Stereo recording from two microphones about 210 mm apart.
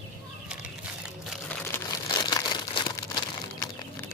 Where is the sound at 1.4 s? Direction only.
15° left (ahead or behind).